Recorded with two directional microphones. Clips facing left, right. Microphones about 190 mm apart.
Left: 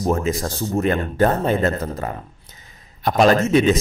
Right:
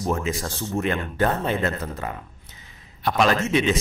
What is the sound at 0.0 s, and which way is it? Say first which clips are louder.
A man's voice: left 5 dB; 40° left (ahead or behind).